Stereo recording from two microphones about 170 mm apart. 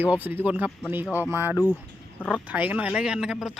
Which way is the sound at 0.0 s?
10° right (ahead or behind).